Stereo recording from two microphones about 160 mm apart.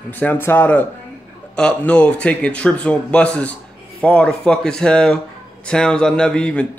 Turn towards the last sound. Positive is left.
turn(degrees=5)  # may be behind; listen again after turning